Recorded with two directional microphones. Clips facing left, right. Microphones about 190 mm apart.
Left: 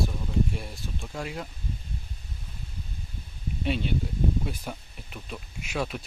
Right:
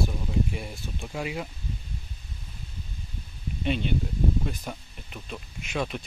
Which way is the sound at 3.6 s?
5° left (ahead or behind).